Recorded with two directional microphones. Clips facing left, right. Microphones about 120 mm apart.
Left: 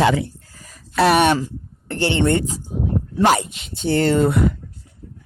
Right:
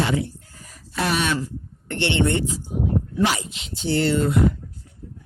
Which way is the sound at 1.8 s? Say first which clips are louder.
Left 3 dB; 35° left (ahead or behind).